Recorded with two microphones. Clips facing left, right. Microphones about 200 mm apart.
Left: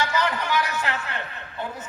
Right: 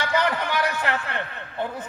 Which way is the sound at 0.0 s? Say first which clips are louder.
Right 1 dB; 60° right (ahead or behind).